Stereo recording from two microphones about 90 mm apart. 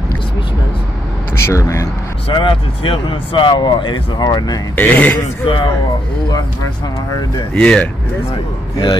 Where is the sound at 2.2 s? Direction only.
65° left (ahead or behind); by 4.6 s 50° left (ahead or behind).